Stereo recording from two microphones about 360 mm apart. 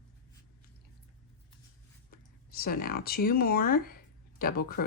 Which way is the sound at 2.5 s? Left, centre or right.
Left.